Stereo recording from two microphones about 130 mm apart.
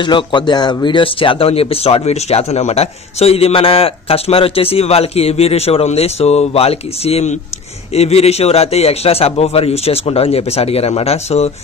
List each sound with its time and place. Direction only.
0.0 s speech: 35° left (ahead or behind); by 11.5 s 55° left (ahead or behind)